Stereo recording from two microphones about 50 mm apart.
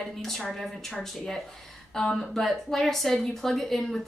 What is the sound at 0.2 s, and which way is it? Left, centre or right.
A woman's voice, centre.